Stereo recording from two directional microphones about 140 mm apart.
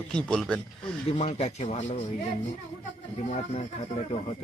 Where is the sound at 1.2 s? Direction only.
50° left (ahead or behind).